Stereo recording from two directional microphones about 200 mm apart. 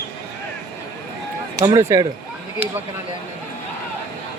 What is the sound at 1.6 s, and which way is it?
Speech, 15° right (ahead or behind).